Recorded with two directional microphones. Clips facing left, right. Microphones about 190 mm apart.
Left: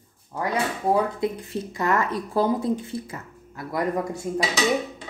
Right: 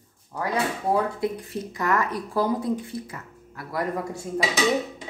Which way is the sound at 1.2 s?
25° left (ahead or behind).